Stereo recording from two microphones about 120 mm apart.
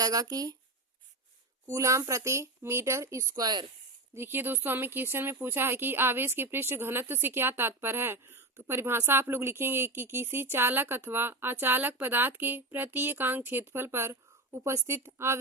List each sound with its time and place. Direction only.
0.0 s speech: 30° right (ahead or behind)
1.7 s speech: 25° right (ahead or behind)
4.1 s speech: 20° right (ahead or behind)